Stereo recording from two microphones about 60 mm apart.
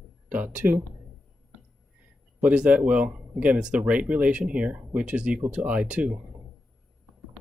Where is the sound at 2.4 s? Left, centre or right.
Right.